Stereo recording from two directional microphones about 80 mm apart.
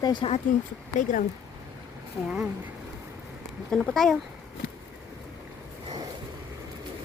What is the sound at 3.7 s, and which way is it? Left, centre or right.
Speech, centre.